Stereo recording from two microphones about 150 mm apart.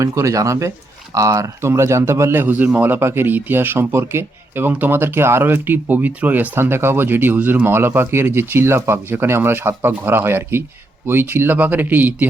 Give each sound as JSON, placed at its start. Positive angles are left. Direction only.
{"t": 0.0, "sound": "a man's voice", "side_deg": -20}